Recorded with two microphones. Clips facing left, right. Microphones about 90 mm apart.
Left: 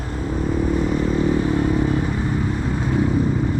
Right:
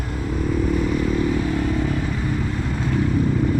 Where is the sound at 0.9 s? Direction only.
20° left (ahead or behind).